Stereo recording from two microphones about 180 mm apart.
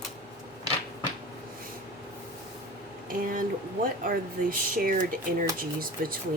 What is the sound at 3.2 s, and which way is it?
Speech, 50° right (ahead or behind).